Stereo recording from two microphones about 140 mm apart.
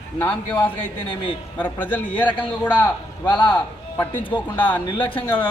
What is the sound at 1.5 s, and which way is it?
A man's voice, 10° left (ahead or behind).